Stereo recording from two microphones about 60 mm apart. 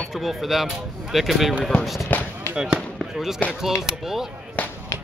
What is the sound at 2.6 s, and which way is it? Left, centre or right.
Speech, centre.